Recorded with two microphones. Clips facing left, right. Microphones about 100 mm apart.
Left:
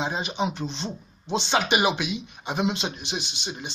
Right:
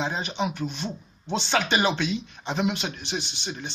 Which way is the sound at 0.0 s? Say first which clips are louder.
Left 1 dB; 15° left (ahead or behind).